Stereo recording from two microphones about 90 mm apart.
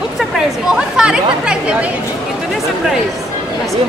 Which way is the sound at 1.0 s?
10° right (ahead or behind).